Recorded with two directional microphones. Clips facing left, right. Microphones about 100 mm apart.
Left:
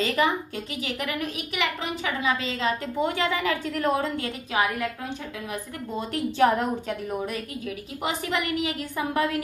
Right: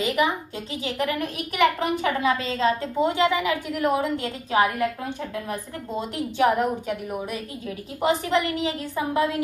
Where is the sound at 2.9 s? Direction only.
20° right (ahead or behind).